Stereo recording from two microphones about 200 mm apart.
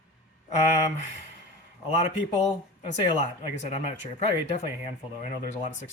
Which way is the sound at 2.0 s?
35° left (ahead or behind).